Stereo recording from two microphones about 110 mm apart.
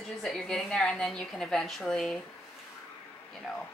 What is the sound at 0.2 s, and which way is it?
A woman's voice, 5° left (ahead or behind).